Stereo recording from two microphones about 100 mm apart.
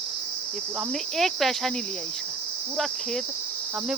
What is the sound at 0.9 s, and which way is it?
Cricket, centre (ahead or behind).